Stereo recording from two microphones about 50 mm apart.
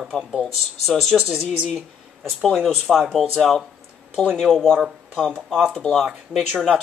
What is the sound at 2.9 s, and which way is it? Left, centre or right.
A man's voice, centre.